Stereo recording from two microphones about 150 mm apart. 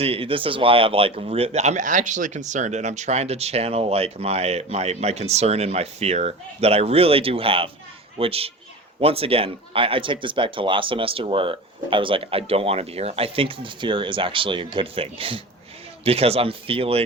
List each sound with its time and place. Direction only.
0.0 s speech: 40° right (ahead or behind)